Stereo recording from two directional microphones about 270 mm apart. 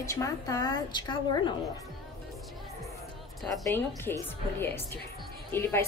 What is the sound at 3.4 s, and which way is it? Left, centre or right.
A woman's voice, centre.